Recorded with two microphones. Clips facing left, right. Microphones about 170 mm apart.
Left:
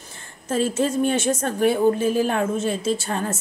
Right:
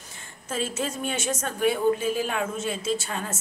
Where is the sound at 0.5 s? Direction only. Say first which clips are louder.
Left 8 dB; 35° left (ahead or behind).